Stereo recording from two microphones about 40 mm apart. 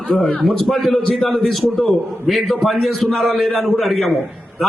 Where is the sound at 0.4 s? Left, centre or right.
Centre.